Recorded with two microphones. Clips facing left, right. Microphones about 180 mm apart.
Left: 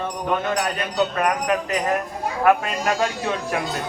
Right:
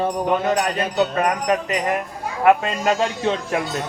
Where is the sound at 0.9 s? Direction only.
20° right (ahead or behind).